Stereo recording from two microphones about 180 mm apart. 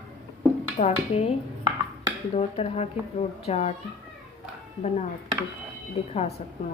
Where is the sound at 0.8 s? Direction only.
35° left (ahead or behind).